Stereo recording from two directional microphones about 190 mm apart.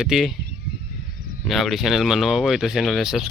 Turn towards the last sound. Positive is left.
turn(degrees=0)  # may be behind; listen again after turning